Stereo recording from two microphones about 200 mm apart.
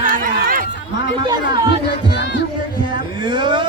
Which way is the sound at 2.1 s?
60° left (ahead or behind).